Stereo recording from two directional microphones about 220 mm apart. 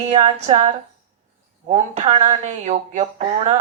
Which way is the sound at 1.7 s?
30° right (ahead or behind).